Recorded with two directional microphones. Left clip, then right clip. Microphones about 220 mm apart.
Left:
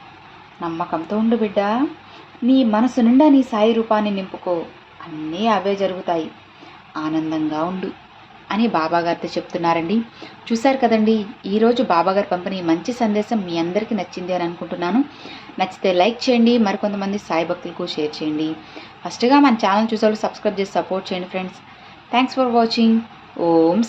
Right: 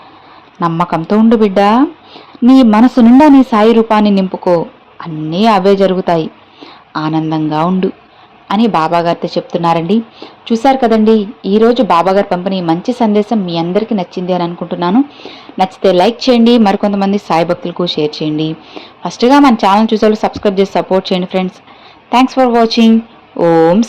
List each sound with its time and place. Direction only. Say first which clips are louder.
0.6 s a woman's voice: right 10 dB; 45° right (ahead or behind)